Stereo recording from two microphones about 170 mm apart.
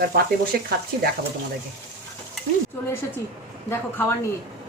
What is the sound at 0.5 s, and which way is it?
Speech, 65° right (ahead or behind).